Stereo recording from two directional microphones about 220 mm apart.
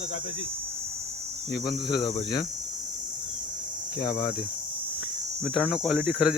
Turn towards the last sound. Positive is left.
turn(degrees=-5)  # may be behind; listen again after turning